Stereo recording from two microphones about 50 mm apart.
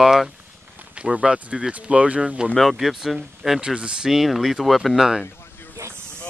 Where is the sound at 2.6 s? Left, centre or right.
Centre.